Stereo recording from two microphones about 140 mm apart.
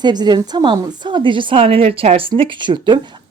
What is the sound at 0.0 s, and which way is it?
Speech, 30° right (ahead or behind).